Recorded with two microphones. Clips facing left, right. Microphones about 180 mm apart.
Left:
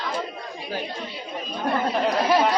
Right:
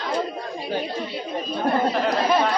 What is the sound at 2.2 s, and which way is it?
Speech, 5° left (ahead or behind).